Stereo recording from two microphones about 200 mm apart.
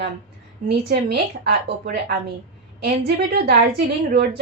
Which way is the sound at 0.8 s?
50° right (ahead or behind).